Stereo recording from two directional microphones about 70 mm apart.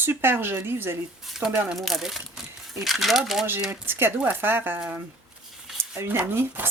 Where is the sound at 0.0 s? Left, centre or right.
Right.